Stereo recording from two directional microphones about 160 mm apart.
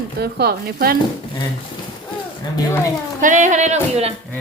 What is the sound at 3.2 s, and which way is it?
Music, 50° right (ahead or behind).